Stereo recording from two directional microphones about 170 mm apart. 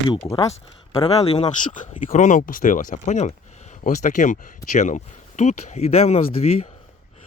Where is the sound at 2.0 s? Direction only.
45° left (ahead or behind).